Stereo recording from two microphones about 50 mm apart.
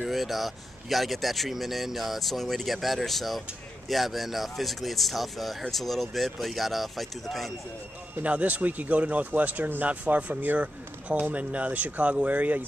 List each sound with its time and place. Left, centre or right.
0.0 s speech: centre
8.2 s speech: right